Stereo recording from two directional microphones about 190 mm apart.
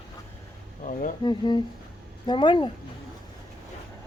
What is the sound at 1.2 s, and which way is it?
Speech, 25° left (ahead or behind).